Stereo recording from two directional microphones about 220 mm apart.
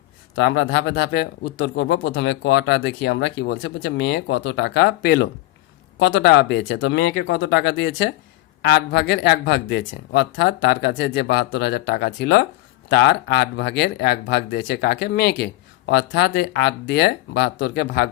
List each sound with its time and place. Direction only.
0.4 s speech: 50° left (ahead or behind)